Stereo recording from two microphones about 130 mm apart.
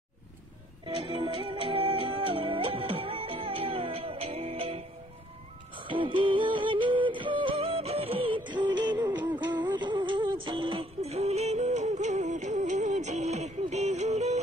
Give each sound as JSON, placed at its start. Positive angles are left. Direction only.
{"t": 0.8, "sound": "music", "side_deg": -45}
{"t": 9.2, "sound": "music", "side_deg": -10}
{"t": 9.7, "sound": "music", "side_deg": -35}